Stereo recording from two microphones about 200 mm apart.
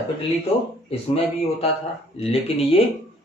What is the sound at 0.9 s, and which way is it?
Speech, 30° left (ahead or behind).